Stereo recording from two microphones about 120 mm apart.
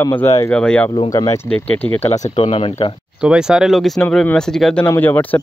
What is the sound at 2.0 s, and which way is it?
Speech, 50° left (ahead or behind).